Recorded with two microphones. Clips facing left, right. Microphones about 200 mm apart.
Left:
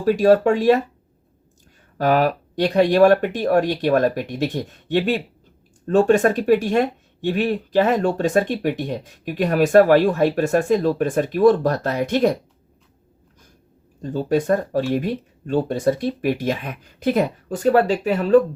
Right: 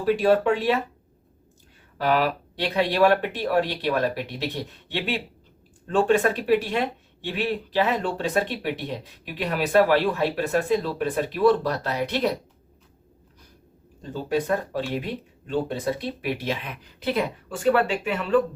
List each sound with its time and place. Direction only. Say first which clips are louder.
0.0 s speech: left 5 dB; 45° left (ahead or behind)
2.0 s speech: left 5 dB; 45° left (ahead or behind)
14.0 s speech: left 5 dB; 45° left (ahead or behind)